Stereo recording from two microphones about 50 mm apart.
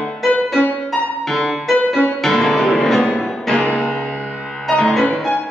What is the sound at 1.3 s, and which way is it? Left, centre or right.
Music, centre.